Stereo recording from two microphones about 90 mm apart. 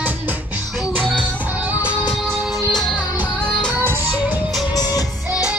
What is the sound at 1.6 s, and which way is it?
Music, 15° right (ahead or behind).